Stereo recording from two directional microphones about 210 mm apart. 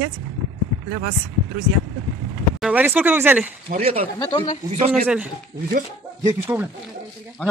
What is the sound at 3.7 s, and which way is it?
Speech, 30° right (ahead or behind).